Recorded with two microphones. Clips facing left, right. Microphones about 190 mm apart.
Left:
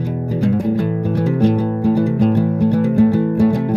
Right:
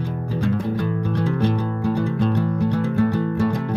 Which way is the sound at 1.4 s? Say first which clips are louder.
Left 7 dB; 40° left (ahead or behind).